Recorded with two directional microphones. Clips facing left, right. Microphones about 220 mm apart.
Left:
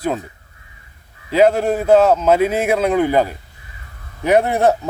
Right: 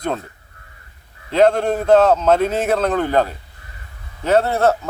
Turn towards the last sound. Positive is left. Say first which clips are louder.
# left 1 dB
turn(degrees=15)  # may be behind; listen again after turning